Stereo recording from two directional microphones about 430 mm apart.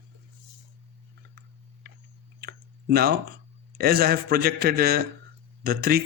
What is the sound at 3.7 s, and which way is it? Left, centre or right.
A man's voice, right.